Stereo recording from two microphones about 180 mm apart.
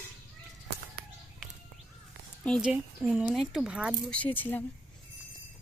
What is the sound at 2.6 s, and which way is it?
A woman's voice, 5° right (ahead or behind).